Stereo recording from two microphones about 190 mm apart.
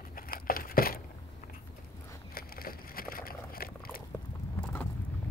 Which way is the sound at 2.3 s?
50° left (ahead or behind).